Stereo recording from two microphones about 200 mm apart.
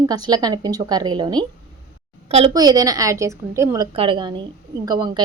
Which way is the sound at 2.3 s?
35° right (ahead or behind).